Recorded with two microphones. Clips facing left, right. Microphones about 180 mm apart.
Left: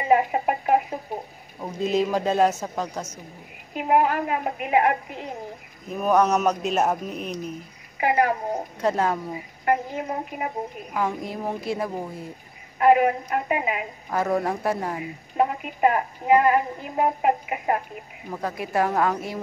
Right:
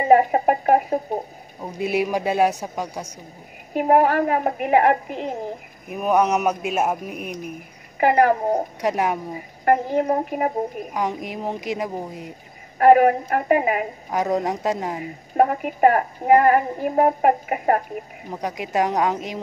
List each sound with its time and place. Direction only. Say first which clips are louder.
0.0 s speech: right 5 dB; 45° right (ahead or behind)
1.6 s a woman's voice: even; 10° right (ahead or behind)
3.7 s a woman's voice: right 4 dB; 50° right (ahead or behind)
5.9 s a woman's voice: right 1 dB; 15° right (ahead or behind)
8.0 s a woman's voice: right 5 dB; 50° right (ahead or behind)
8.8 s a woman's voice: left 1 dB; 15° right (ahead or behind)
9.7 s a woman's voice: right 6 dB; 45° right (ahead or behind)
10.9 s a woman's voice: right 1 dB; 20° right (ahead or behind)
12.7 s a woman's voice: right 4 dB; 50° right (ahead or behind)
14.1 s a woman's voice: right 1 dB; 15° right (ahead or behind)
15.3 s a woman's voice: right 5 dB; 50° right (ahead or behind)
18.3 s a woman's voice: right 1 dB; 15° right (ahead or behind)